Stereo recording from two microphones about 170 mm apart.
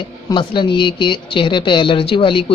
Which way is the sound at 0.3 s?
30° left (ahead or behind).